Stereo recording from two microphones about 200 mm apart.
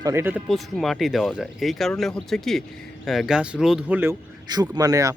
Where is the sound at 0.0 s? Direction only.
15° right (ahead or behind).